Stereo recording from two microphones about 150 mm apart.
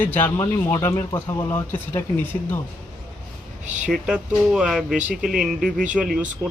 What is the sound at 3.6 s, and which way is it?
Speech, 55° right (ahead or behind).